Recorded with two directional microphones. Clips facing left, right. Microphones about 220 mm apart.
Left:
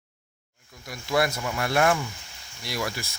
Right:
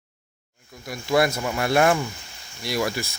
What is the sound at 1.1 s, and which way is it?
Speech, 25° right (ahead or behind).